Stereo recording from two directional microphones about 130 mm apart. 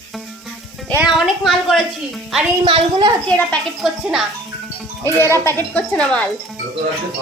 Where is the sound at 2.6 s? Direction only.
40° right (ahead or behind).